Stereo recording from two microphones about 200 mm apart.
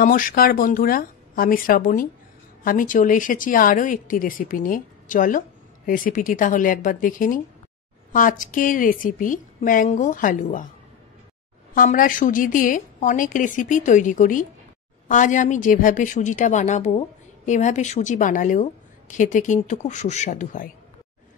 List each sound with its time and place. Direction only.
0.0 s a woman's voice: 40° left (ahead or behind)
11.7 s a woman's voice: 45° left (ahead or behind)